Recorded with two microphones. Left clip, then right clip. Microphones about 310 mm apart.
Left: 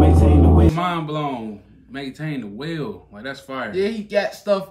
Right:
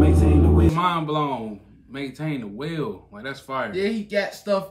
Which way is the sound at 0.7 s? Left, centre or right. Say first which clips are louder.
Right 1 dB; centre.